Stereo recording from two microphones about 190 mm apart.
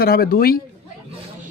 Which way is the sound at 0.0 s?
50° left (ahead or behind).